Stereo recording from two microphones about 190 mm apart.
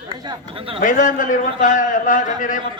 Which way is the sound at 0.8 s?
40° left (ahead or behind).